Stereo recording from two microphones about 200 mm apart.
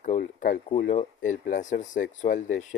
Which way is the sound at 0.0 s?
40° left (ahead or behind).